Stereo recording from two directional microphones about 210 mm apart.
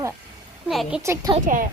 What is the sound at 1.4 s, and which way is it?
Speech, 40° right (ahead or behind).